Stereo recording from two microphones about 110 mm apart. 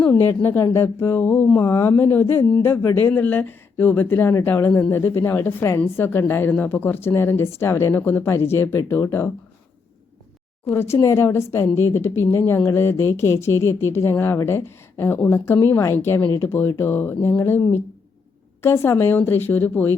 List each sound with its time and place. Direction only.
0.3 s speech: 20° left (ahead or behind)
10.7 s speech: 25° left (ahead or behind)